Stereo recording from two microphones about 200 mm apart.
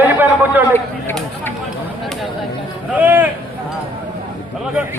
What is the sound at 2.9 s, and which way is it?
Speech, 10° right (ahead or behind).